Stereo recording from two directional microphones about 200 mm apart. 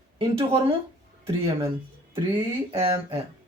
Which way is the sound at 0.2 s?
25° right (ahead or behind).